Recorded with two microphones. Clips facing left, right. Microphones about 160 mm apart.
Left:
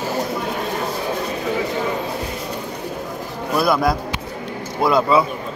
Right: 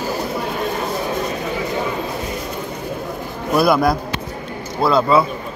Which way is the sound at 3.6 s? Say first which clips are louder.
Right 3 dB; 5° right (ahead or behind).